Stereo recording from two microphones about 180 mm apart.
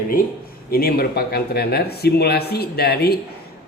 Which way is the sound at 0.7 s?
55° left (ahead or behind).